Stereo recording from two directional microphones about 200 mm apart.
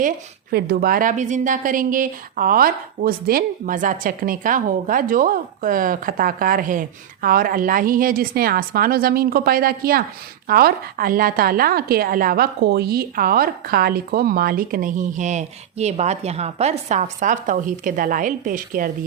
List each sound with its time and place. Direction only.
0.5 s a woman's voice: 50° right (ahead or behind)